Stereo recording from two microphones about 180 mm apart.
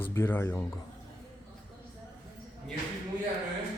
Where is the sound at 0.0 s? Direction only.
10° left (ahead or behind).